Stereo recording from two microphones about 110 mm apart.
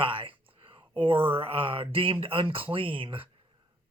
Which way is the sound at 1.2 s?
55° right (ahead or behind).